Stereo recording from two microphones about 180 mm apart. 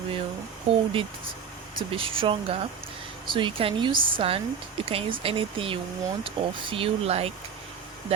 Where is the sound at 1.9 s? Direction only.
30° right (ahead or behind).